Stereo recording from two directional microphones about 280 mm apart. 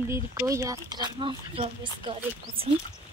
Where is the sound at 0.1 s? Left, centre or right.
Centre.